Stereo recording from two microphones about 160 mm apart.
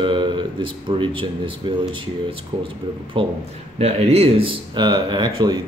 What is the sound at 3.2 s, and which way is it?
Speech, 35° right (ahead or behind).